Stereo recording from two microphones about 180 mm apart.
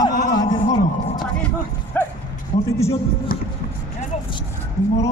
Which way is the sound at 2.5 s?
45° left (ahead or behind).